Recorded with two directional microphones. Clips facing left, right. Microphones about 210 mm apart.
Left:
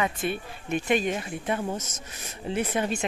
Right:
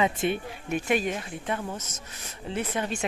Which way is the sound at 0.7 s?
5° right (ahead or behind).